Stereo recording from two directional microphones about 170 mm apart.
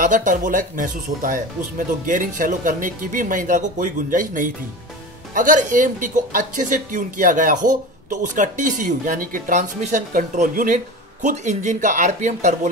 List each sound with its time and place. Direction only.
0.0 s speech: 50° right (ahead or behind)